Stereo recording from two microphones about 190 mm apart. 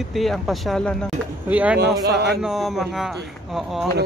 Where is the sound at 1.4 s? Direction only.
10° right (ahead or behind).